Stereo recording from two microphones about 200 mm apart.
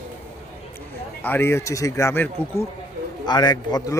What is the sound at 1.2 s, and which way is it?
A man's voice, 10° left (ahead or behind).